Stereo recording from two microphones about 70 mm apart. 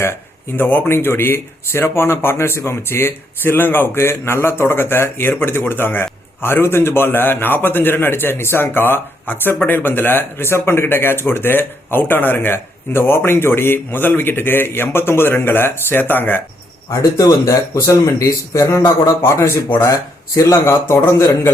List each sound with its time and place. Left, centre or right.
0.5 s speech: left
16.9 s speech: left
19.9 s speech: left